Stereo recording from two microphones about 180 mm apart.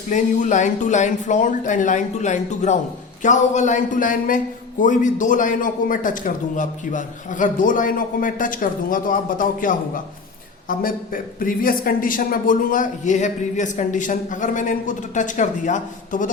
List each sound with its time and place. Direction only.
0.1 s speech: 45° left (ahead or behind)